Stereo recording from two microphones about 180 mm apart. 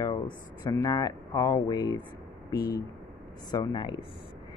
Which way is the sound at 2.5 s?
55° left (ahead or behind).